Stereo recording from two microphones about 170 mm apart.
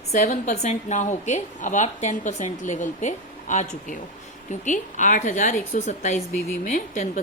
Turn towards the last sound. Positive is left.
turn(degrees=45)  # may be behind; listen again after turning